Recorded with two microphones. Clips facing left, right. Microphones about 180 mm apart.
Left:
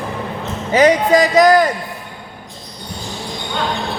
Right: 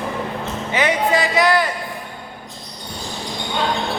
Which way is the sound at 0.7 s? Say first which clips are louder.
Left 7 dB; 40° left (ahead or behind).